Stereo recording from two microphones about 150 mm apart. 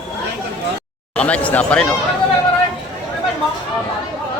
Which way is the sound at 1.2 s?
10° left (ahead or behind).